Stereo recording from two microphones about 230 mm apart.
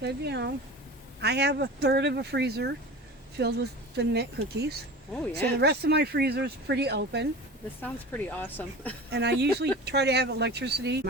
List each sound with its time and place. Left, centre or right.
0.0 s speech: right
7.8 s speech: centre
9.1 s speech: right